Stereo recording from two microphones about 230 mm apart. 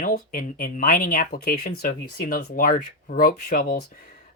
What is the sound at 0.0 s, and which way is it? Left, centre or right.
Speech, left.